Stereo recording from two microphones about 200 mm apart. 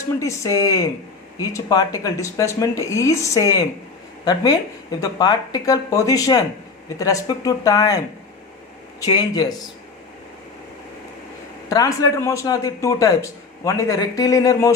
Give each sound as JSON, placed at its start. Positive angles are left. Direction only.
{"t": 0.2, "sound": "speech", "side_deg": 15}
{"t": 9.0, "sound": "speech", "side_deg": 20}
{"t": 11.7, "sound": "speech", "side_deg": 15}